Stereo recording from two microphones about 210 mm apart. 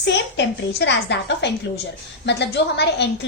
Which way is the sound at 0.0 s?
55° left (ahead or behind).